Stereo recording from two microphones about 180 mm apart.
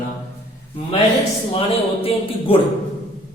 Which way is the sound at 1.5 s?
30° left (ahead or behind).